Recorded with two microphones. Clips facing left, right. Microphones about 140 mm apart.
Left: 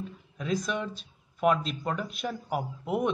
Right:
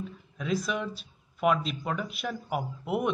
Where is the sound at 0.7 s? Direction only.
5° right (ahead or behind).